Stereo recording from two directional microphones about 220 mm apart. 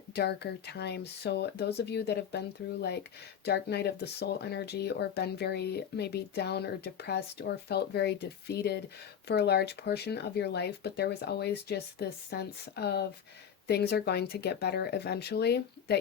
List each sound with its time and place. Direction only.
0.1 s speech: 50° left (ahead or behind)
3.4 s speech: 50° left (ahead or behind)